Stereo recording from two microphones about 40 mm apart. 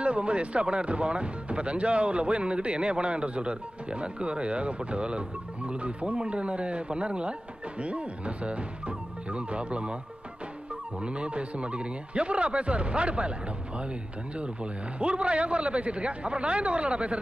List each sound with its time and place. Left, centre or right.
0.0 s speech: right
11.0 s speech: right
14.3 s speech: right